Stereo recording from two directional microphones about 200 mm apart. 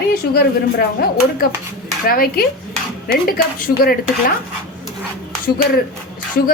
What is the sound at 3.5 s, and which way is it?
Speech, 45° left (ahead or behind).